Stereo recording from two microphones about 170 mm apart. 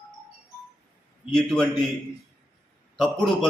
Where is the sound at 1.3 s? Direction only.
Centre (ahead or behind).